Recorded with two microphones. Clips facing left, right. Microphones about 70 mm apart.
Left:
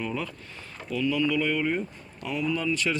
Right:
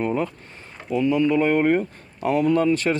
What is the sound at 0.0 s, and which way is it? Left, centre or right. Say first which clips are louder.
Speech: right 8 dB; right.